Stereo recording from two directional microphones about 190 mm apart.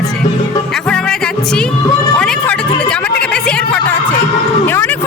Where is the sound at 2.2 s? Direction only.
5° left (ahead or behind).